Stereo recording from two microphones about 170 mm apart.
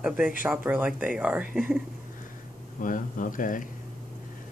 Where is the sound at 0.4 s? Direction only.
10° right (ahead or behind).